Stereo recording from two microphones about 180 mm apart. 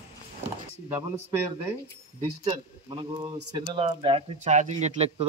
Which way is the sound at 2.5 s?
25° right (ahead or behind).